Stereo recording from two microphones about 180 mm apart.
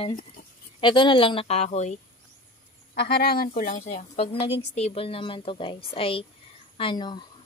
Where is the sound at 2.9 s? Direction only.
60° left (ahead or behind); by 4.2 s 45° left (ahead or behind).